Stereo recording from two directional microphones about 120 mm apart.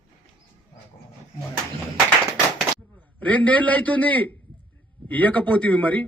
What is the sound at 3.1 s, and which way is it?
A man's voice, 15° left (ahead or behind).